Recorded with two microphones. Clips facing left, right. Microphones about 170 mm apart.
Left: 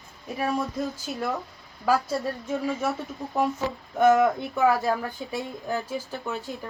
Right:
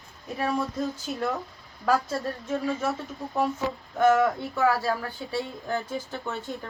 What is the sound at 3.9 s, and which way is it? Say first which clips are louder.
Speech: left 2 dB; 20° left (ahead or behind).